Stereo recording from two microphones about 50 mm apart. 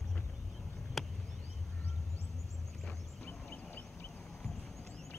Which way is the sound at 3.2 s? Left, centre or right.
Left.